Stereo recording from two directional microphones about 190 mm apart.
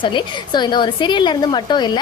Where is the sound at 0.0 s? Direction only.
25° left (ahead or behind).